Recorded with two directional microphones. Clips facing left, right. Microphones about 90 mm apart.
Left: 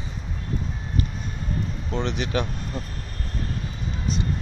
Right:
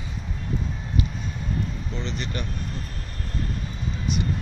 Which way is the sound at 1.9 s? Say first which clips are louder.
Left 6 dB; 65° left (ahead or behind).